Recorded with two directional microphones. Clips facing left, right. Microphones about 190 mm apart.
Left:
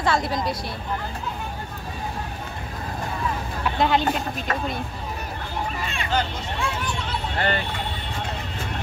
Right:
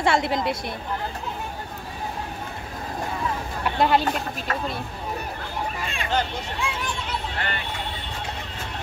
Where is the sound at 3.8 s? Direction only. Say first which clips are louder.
Right 1 dB; 10° right (ahead or behind).